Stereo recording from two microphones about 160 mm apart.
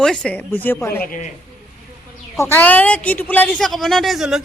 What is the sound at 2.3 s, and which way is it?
A woman's voice, 15° left (ahead or behind).